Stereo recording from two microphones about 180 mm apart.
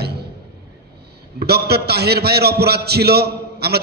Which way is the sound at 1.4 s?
65° right (ahead or behind).